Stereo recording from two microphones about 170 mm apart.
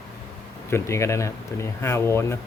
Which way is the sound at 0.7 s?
15° left (ahead or behind).